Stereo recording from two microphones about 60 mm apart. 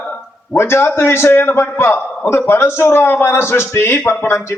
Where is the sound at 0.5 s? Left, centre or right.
Left.